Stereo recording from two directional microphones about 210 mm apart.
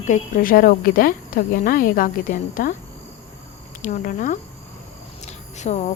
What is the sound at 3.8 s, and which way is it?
Speech, 35° left (ahead or behind).